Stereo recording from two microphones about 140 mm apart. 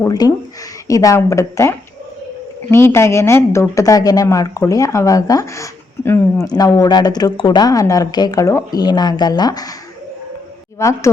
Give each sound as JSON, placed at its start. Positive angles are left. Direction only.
{"t": 0.0, "sound": "speech", "side_deg": 25}
{"t": 10.8, "sound": "speech", "side_deg": 20}